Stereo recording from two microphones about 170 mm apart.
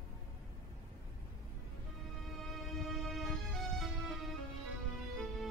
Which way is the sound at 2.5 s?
Centre (ahead or behind).